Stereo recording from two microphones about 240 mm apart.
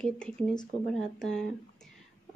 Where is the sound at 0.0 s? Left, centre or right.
Centre.